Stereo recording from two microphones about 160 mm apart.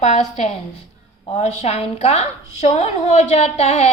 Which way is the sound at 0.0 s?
45° left (ahead or behind).